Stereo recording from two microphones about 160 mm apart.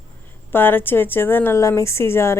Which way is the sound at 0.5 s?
15° left (ahead or behind).